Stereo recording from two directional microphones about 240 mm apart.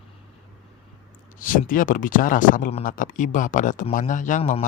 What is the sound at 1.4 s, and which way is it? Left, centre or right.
Speech, left.